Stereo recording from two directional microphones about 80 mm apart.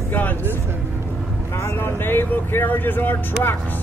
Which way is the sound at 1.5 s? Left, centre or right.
Left.